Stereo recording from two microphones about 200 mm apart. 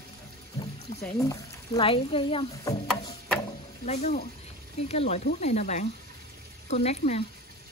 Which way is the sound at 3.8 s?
35° left (ahead or behind).